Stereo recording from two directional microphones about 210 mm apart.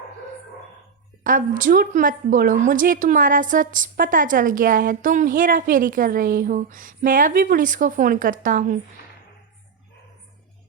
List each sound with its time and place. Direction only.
1.2 s a woman's voice: 40° right (ahead or behind)